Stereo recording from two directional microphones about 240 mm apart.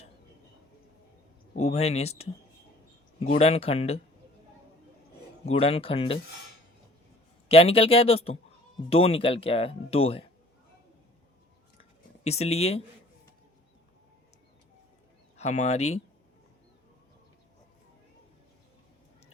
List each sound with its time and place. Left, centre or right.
1.5 s speech: left
5.5 s speech: left
7.4 s speech: left
11.8 s a sound: left
15.4 s speech: left